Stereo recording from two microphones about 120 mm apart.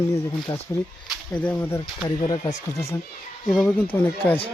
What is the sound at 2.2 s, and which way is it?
Speech, 45° left (ahead or behind).